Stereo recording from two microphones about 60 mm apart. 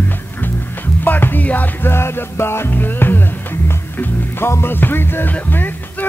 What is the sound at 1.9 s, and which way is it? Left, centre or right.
Music, left.